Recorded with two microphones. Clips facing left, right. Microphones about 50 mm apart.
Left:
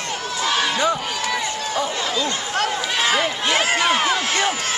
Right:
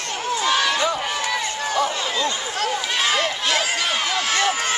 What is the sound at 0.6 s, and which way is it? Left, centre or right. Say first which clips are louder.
Speech: left 1 dB; centre.